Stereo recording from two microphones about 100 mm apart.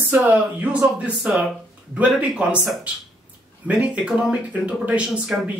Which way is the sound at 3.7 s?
10° right (ahead or behind).